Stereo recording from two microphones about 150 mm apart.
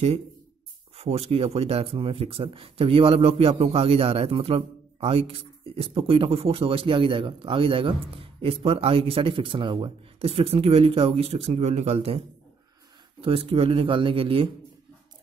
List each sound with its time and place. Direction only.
0.9 s speech: 40° right (ahead or behind)
13.2 s speech: 40° right (ahead or behind)